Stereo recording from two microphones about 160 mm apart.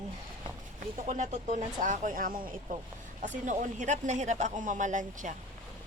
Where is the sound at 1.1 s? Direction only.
50° right (ahead or behind).